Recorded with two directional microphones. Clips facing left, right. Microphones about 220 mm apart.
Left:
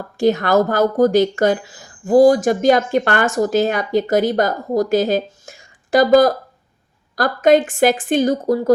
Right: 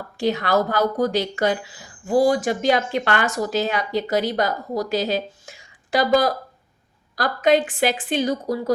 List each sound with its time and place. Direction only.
0.2 s speech: 45° left (ahead or behind)